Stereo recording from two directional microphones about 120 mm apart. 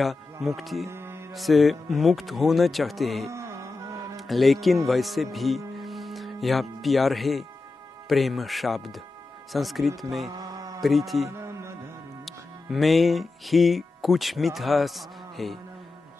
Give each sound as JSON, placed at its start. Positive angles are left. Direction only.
{"t": 0.0, "sound": "speech", "side_deg": 0}
{"t": 0.8, "sound": "music", "side_deg": -20}
{"t": 1.3, "sound": "speech", "side_deg": 0}
{"t": 3.3, "sound": "music", "side_deg": -25}
{"t": 4.2, "sound": "speech", "side_deg": 0}
{"t": 10.2, "sound": "mantra", "side_deg": -30}
{"t": 10.8, "sound": "speech", "side_deg": 0}
{"t": 11.2, "sound": "music", "side_deg": -25}
{"t": 12.3, "sound": "music", "side_deg": 0}